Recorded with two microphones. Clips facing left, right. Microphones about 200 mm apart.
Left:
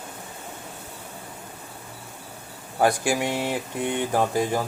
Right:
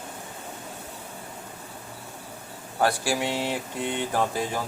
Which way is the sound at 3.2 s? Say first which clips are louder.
Left 2 dB; 10° left (ahead or behind).